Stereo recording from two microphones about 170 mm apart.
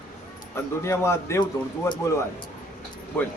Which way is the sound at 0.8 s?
15° left (ahead or behind).